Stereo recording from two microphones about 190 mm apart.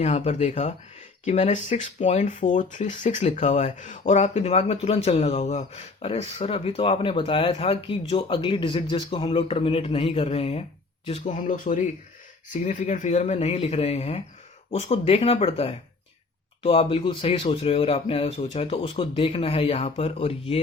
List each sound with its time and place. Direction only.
0.0 s speech: 35° left (ahead or behind)